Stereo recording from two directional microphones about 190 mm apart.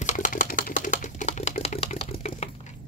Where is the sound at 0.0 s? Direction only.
45° left (ahead or behind).